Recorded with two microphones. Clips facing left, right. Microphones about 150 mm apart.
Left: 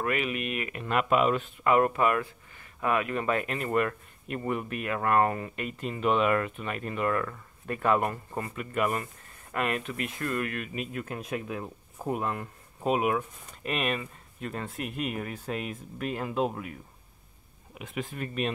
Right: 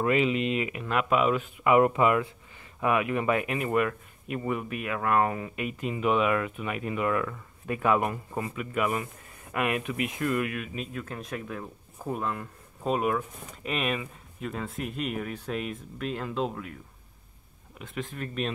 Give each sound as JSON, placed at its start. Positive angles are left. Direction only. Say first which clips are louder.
{"t": 0.0, "sound": "speech", "louder": "right 5 dB", "side_deg": -20}
{"t": 0.7, "sound": "speech", "louder": "left 3 dB", "side_deg": 0}
{"t": 17.7, "sound": "speech", "louder": "left 1 dB", "side_deg": 10}